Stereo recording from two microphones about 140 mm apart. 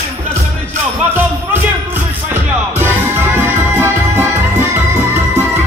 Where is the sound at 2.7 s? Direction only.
15° right (ahead or behind).